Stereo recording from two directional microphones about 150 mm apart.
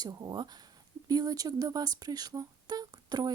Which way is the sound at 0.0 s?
25° right (ahead or behind).